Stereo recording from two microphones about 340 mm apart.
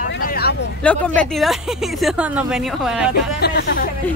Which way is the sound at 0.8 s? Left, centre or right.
Centre.